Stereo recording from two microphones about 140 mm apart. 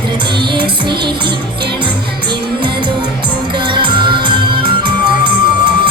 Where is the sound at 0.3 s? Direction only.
35° right (ahead or behind).